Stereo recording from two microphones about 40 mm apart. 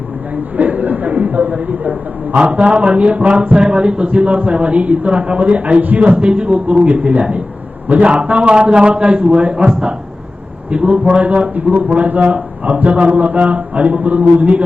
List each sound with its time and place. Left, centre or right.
0.5 s a man's voice: right
10.7 s a man's voice: right